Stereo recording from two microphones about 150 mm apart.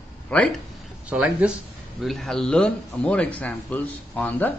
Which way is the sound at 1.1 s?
10° right (ahead or behind).